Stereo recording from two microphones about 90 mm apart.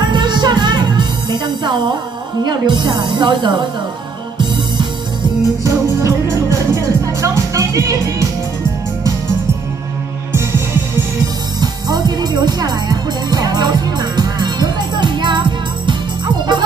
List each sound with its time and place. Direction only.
0.0 s music: 55° right (ahead or behind)
5.6 s music: 35° right (ahead or behind)
11.6 s music: 50° right (ahead or behind)